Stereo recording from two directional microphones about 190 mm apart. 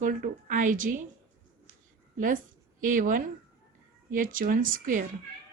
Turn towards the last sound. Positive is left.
turn(degrees=-45)  # may be behind; listen again after turning